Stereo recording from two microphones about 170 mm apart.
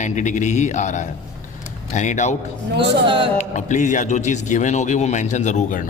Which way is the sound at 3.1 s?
30° right (ahead or behind).